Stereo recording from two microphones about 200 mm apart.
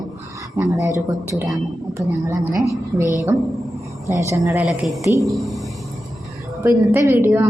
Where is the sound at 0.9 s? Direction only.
15° right (ahead or behind).